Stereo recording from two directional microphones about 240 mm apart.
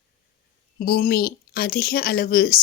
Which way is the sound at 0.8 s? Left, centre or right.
Left.